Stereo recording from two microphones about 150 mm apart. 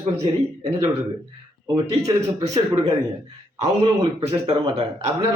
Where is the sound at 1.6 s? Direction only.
30° right (ahead or behind).